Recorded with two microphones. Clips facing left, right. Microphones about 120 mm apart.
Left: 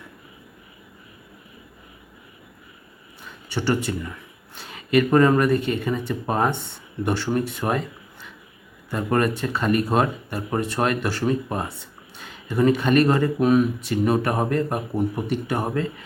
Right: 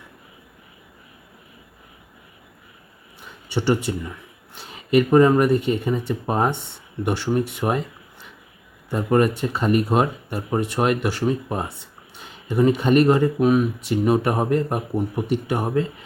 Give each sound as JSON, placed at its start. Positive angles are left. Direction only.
{"t": 3.2, "sound": "speech", "side_deg": -20}